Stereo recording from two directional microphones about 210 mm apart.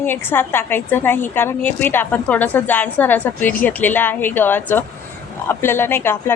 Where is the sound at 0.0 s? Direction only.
10° left (ahead or behind).